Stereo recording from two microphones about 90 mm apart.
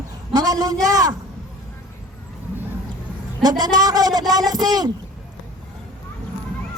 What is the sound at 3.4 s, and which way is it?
A man's voice, 50° right (ahead or behind).